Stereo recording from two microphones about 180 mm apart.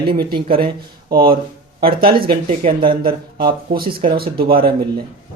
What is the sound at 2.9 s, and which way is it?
Speech, 55° right (ahead or behind).